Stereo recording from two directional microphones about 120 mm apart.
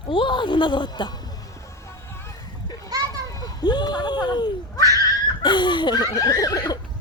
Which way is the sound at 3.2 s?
30° left (ahead or behind).